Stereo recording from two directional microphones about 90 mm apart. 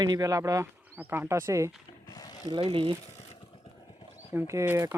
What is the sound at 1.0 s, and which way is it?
Speech, 25° right (ahead or behind).